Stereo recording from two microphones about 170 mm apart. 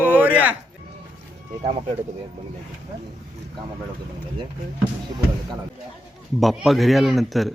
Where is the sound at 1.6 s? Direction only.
40° right (ahead or behind).